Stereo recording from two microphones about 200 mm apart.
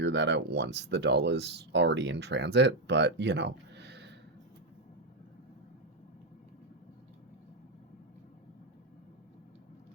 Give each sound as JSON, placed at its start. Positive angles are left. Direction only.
{"t": 0.0, "sound": "speech", "side_deg": -60}